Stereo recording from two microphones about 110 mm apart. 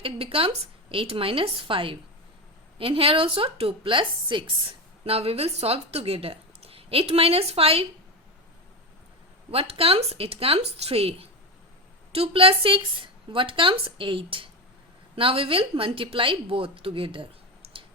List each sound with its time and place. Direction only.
0.0 s a woman's voice: 60° right (ahead or behind)
5.0 s a woman's voice: 60° right (ahead or behind)
9.5 s a woman's voice: 60° right (ahead or behind)